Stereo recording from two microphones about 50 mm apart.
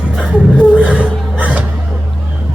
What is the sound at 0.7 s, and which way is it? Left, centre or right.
Music, right.